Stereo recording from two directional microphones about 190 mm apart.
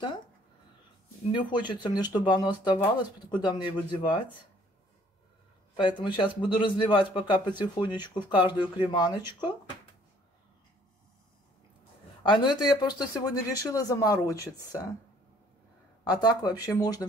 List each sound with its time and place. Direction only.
1.3 s speech: 25° left (ahead or behind)
5.8 s speech: 25° left (ahead or behind)
12.2 s speech: 25° left (ahead or behind)
16.0 s speech: 20° left (ahead or behind)